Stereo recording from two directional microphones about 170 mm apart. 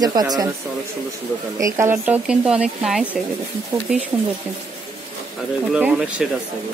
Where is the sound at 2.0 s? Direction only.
5° right (ahead or behind).